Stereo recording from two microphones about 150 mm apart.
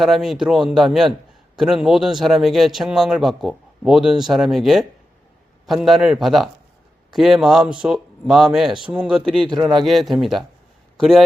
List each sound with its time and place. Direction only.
0.0 s a man's voice: centre (ahead or behind)